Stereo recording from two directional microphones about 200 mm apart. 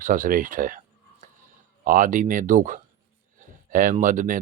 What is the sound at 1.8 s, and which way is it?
Speech, 40° right (ahead or behind).